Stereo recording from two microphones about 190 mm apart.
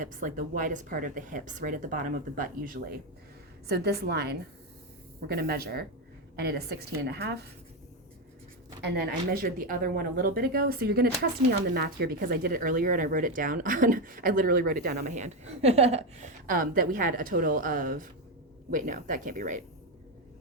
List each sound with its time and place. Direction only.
0.0 s a woman's voice: 45° right (ahead or behind)
8.8 s speech: 55° right (ahead or behind)